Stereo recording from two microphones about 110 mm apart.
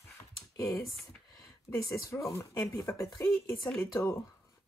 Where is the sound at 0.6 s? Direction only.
25° left (ahead or behind).